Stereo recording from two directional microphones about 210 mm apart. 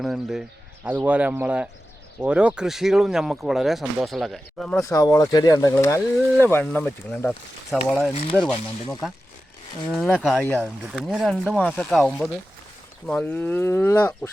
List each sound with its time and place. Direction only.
0.0 s speech: centre (ahead or behind)
4.8 s speech: 15° left (ahead or behind)
9.9 s speech: centre (ahead or behind)